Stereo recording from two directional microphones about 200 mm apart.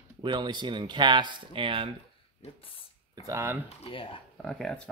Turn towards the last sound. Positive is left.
turn(degrees=5)  # may be behind; listen again after turning